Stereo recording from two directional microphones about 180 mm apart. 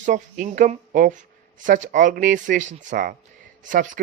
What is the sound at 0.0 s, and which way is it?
Speech, 45° right (ahead or behind).